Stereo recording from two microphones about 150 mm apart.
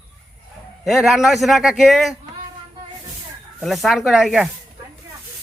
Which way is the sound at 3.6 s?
Centre (ahead or behind).